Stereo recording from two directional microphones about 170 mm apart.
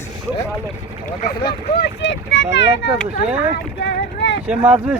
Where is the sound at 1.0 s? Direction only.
65° left (ahead or behind).